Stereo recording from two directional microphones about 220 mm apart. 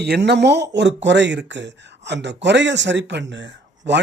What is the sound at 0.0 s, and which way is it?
Speech, 50° right (ahead or behind).